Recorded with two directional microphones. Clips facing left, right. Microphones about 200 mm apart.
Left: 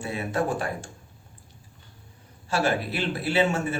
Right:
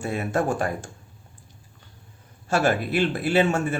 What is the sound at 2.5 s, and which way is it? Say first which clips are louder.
Speech: right 3 dB; 50° right (ahead or behind).